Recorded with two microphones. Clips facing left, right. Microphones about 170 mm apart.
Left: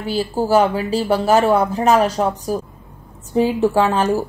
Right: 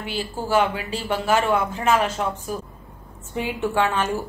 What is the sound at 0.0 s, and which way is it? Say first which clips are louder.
A woman's voice: left 8 dB; 40° left (ahead or behind).